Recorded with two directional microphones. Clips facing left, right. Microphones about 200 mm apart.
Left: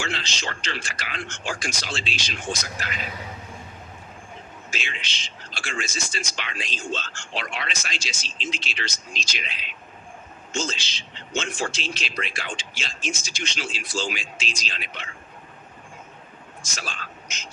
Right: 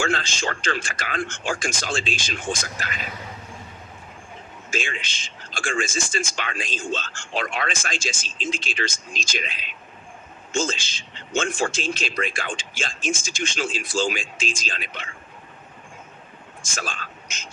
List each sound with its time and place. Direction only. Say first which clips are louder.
0.0 s a man's voice: right 6 dB; 50° right (ahead or behind)
4.7 s a man's voice: right 7 dB; 50° right (ahead or behind)
16.6 s a man's voice: right 4 dB; 50° right (ahead or behind)